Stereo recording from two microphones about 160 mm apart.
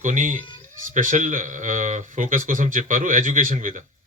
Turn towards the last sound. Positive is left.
turn(degrees=-55)  # may be behind; listen again after turning